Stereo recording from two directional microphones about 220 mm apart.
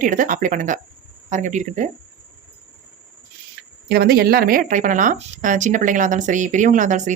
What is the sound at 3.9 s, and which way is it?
Speech, 45° right (ahead or behind).